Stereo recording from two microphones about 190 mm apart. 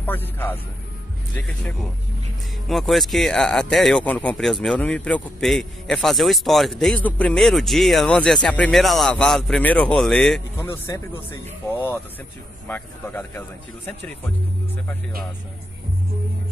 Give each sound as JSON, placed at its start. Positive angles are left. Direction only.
{"t": 0.0, "sound": "a man's voice", "side_deg": 10}
{"t": 10.6, "sound": "speech", "side_deg": 15}